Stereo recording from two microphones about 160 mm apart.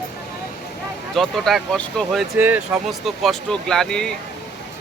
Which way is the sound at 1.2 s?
Centre (ahead or behind).